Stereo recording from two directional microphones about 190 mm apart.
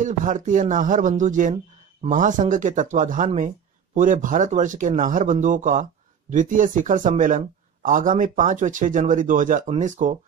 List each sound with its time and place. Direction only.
0.0 s a man's voice: 40° right (ahead or behind)